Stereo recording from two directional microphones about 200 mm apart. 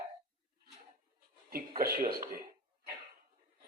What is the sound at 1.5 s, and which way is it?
Speech, 50° right (ahead or behind).